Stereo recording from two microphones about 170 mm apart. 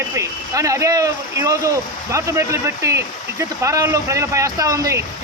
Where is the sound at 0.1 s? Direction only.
20° right (ahead or behind).